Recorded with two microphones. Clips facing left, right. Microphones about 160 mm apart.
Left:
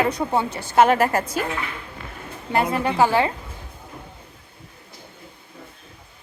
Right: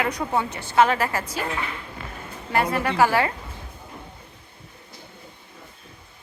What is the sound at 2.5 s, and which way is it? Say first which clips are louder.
Speech: left 1 dB; 25° left (ahead or behind).